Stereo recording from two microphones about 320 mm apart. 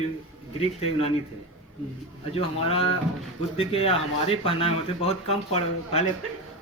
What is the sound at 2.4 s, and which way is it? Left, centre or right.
Speech, centre.